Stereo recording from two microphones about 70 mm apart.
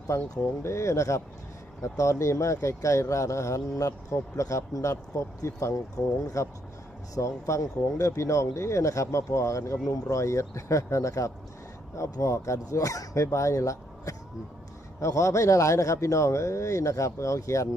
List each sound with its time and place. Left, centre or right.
0.1 s speech: left